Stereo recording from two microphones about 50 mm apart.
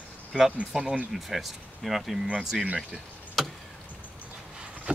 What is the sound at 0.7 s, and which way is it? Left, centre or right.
Speech, centre.